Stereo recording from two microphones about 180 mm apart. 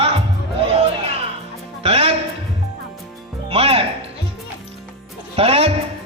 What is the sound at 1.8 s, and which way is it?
Speech, 35° right (ahead or behind).